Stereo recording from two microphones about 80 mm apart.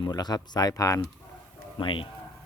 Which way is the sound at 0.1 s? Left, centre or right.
Left.